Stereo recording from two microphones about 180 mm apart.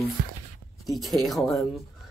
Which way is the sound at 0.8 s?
Centre (ahead or behind).